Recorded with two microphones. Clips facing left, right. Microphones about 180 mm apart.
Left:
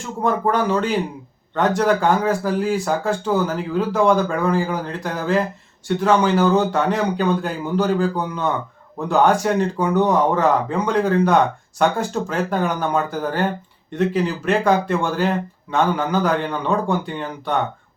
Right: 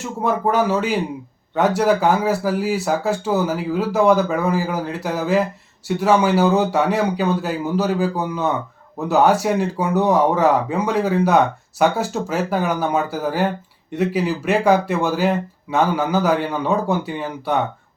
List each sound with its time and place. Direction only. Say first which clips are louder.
0.0 s speech: even; 5° right (ahead or behind)